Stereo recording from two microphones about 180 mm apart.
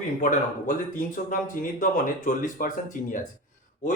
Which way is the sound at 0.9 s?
45° left (ahead or behind).